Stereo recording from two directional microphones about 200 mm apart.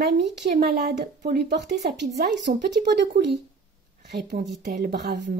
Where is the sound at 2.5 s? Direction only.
45° right (ahead or behind).